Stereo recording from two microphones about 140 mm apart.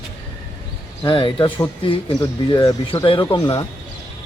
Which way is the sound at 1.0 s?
35° left (ahead or behind).